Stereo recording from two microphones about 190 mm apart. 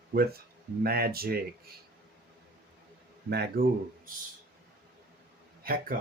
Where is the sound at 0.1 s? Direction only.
55° right (ahead or behind).